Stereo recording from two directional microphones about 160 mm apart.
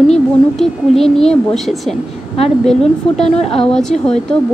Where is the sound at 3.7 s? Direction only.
5° left (ahead or behind).